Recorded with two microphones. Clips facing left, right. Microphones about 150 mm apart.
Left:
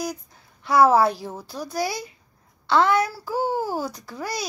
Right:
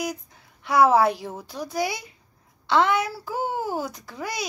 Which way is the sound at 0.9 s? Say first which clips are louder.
Even; 20° right (ahead or behind).